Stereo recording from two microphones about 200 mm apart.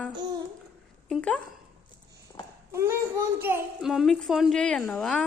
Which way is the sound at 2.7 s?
15° right (ahead or behind).